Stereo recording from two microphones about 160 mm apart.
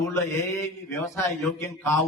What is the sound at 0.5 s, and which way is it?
A man's voice, 20° left (ahead or behind).